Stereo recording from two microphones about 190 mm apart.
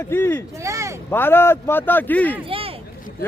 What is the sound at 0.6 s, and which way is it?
Speech, 15° right (ahead or behind).